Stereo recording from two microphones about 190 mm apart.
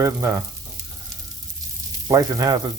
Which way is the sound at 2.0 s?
15° right (ahead or behind).